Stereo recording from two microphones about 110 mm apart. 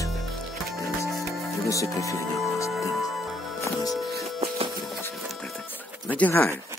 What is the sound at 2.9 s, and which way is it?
Music, centre (ahead or behind).